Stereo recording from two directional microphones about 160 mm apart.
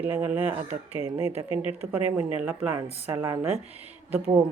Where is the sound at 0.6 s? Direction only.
40° right (ahead or behind).